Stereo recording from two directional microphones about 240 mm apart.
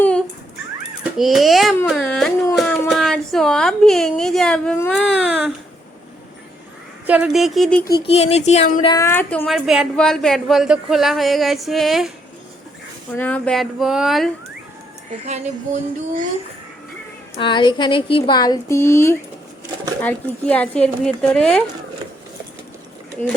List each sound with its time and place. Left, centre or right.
1.2 s a woman's voice: centre
7.1 s a woman's voice: centre
8.0 s a sound: left
8.9 s a woman's voice: centre
13.1 s a woman's voice: centre
15.3 s a sound: right
17.4 s a woman's voice: centre